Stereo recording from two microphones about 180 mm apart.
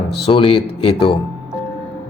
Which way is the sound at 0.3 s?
30° left (ahead or behind).